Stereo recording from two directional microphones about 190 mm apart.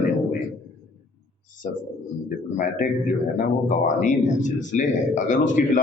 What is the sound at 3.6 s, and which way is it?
A man's voice, 40° left (ahead or behind).